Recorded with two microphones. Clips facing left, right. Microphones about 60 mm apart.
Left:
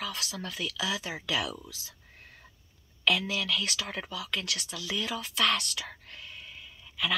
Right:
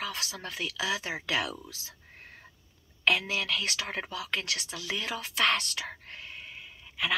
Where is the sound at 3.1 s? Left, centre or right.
Right.